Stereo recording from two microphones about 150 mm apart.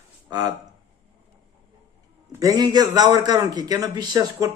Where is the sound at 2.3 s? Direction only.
25° right (ahead or behind).